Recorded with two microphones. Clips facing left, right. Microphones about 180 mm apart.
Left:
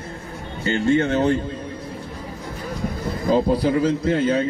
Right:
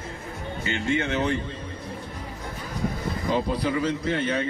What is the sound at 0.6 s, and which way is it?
Speech, 40° left (ahead or behind).